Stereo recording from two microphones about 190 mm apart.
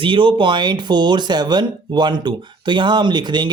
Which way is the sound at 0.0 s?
25° right (ahead or behind).